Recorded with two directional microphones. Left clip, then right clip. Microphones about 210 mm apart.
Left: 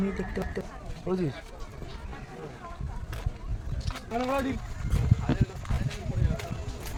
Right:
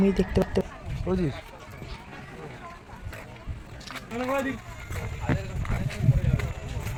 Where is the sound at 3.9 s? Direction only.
10° right (ahead or behind).